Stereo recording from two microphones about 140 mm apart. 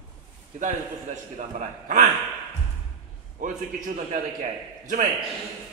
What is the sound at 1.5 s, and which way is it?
Speech, 60° right (ahead or behind).